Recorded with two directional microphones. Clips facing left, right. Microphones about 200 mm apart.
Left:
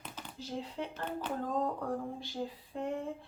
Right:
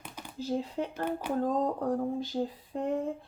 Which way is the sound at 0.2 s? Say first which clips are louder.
Right 3 dB; 10° right (ahead or behind).